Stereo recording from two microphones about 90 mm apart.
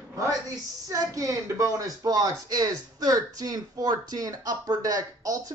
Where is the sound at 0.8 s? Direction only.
40° right (ahead or behind).